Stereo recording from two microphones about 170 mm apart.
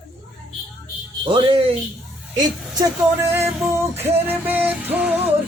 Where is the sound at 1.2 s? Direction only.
30° right (ahead or behind); by 5.3 s 10° right (ahead or behind).